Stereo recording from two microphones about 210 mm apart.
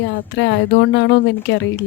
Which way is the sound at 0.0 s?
55° left (ahead or behind).